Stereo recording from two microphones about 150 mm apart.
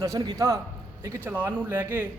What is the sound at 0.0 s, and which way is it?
A man's voice, 20° right (ahead or behind).